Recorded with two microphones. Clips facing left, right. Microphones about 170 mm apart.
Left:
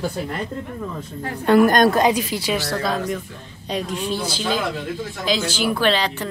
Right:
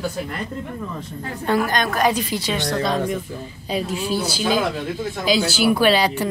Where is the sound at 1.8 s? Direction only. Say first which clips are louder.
Left 3 dB; 25° left (ahead or behind).